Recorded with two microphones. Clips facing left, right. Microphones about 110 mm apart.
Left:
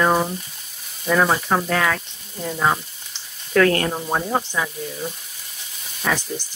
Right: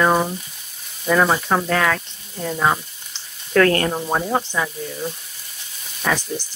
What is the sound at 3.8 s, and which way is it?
Speech, 5° right (ahead or behind).